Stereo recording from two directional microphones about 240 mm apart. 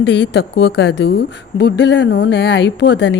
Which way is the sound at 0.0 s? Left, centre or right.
Left.